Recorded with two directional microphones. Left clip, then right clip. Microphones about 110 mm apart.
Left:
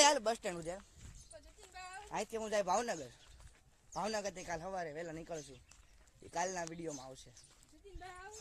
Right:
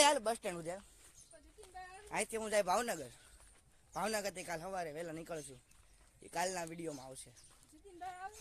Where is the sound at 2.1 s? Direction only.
15° right (ahead or behind).